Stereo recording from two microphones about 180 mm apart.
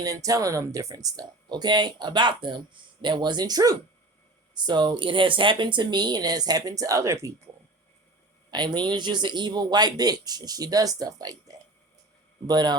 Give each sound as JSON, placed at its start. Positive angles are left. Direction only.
{"t": 0.0, "sound": "speech", "side_deg": -20}
{"t": 8.4, "sound": "speech", "side_deg": -25}